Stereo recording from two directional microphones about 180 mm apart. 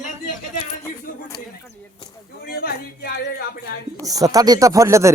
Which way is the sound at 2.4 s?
55° left (ahead or behind).